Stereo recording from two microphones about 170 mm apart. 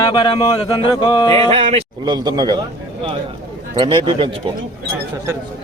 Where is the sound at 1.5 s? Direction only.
35° right (ahead or behind).